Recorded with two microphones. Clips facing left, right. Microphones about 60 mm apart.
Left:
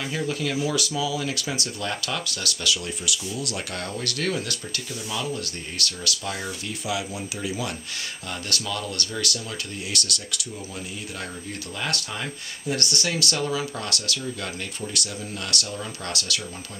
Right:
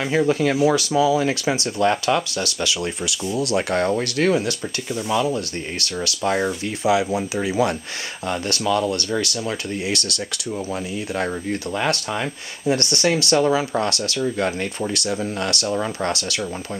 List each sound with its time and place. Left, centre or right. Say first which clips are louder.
0.0 s speech: right 9 dB; right
11.8 s speech: right 5 dB; right